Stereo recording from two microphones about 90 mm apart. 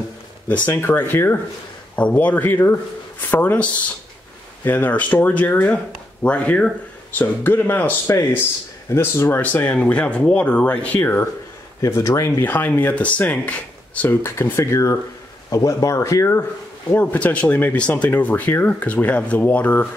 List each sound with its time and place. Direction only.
0.5 s speech: 25° left (ahead or behind)
2.0 s speech: 15° left (ahead or behind)
4.6 s speech: 20° left (ahead or behind)
11.8 s speech: 30° left (ahead or behind)
14.2 s speech: 30° left (ahead or behind)
16.9 s speech: 20° left (ahead or behind)